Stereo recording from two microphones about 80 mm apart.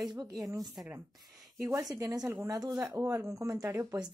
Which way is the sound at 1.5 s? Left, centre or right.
Right.